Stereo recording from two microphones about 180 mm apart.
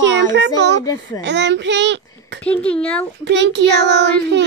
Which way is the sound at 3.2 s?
80° right.